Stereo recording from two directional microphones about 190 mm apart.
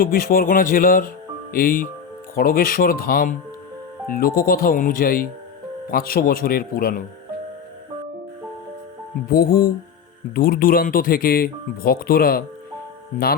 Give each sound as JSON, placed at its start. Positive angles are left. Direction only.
{"t": 0.0, "sound": "speech", "side_deg": 50}
{"t": 9.3, "sound": "speech", "side_deg": 50}